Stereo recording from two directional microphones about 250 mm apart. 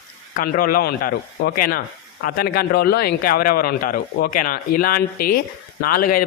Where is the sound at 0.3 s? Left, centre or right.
Left.